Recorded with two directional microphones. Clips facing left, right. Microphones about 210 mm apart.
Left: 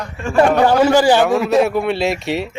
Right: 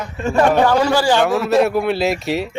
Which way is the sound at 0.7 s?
20° left (ahead or behind).